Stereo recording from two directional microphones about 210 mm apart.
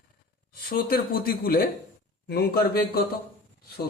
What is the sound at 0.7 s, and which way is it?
A man's voice, 45° left (ahead or behind).